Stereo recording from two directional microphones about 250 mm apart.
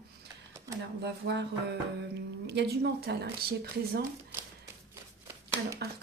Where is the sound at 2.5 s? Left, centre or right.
Right.